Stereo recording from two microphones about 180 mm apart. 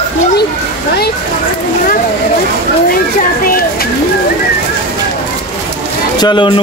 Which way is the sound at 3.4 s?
55° left (ahead or behind).